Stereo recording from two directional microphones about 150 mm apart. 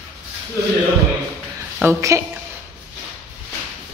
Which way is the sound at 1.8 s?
20° right (ahead or behind).